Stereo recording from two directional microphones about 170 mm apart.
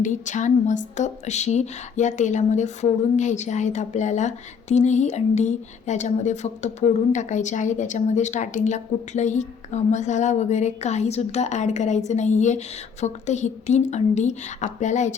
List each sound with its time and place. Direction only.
0.0 s a woman's voice: 45° left (ahead or behind)